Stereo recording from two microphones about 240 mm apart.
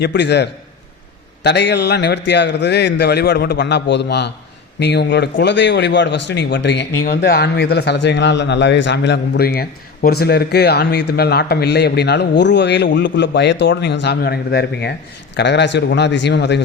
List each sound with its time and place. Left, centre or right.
0.0 s a man's voice: left
1.5 s a man's voice: left